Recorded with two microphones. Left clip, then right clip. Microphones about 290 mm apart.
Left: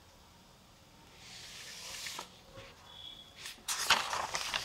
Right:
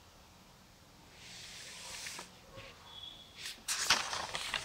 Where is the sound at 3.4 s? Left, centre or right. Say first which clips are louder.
Even; centre.